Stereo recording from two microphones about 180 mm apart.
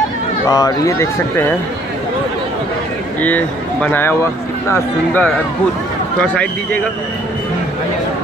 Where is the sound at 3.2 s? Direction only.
10° left (ahead or behind).